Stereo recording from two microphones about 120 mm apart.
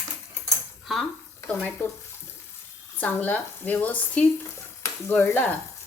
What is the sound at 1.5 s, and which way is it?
Speech, 15° left (ahead or behind).